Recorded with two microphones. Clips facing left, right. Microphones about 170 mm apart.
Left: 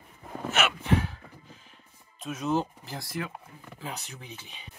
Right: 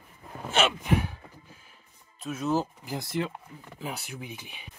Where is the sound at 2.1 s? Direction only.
Centre (ahead or behind).